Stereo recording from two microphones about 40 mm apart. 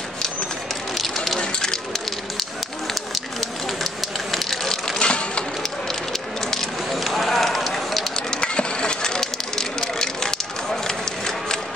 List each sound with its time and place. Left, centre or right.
0.9 s run: centre
1.4 s spray: left
2.9 s spray: centre
5.0 s a sound: left
6.5 s spray: centre
8.2 s a sound: left